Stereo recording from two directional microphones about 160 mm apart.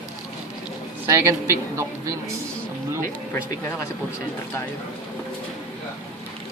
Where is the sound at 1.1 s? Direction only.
20° right (ahead or behind).